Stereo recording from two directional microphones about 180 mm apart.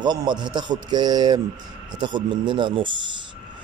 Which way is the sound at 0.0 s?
25° right (ahead or behind).